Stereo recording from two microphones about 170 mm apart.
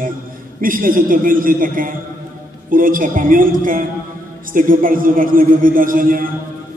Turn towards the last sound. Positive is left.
turn(degrees=-55)  # may be behind; listen again after turning